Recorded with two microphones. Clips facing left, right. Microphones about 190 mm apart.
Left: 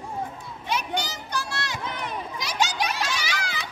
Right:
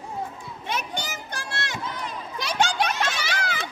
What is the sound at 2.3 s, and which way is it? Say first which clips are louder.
Children playing: right 4 dB; 60° right (ahead or behind).